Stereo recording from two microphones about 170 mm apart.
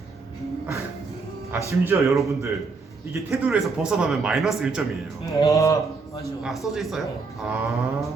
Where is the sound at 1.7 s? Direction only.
15° right (ahead or behind).